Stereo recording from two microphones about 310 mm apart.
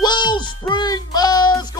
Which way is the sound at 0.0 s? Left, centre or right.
Centre.